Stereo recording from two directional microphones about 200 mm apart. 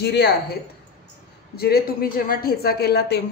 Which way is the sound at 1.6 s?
50° left (ahead or behind).